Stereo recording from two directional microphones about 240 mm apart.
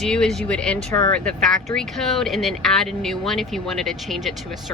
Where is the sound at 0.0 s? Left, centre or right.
Centre.